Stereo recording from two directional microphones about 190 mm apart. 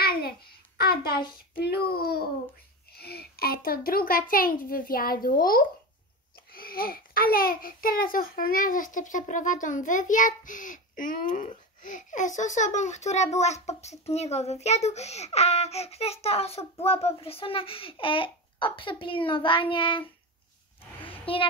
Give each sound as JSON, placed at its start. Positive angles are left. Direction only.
{"t": 0.0, "sound": "a sound", "side_deg": 55}
{"t": 1.6, "sound": "a child's voice", "side_deg": 55}
{"t": 21.3, "sound": "child singing", "side_deg": 30}